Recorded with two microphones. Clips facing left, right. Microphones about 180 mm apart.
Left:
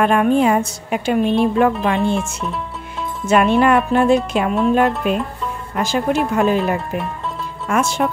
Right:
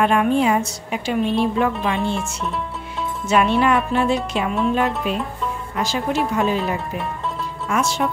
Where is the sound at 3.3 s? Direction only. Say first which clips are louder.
Left 4 dB; 50° left (ahead or behind).